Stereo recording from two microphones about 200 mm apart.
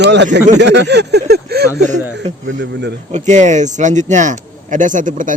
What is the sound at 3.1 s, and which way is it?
Speech, 35° right (ahead or behind).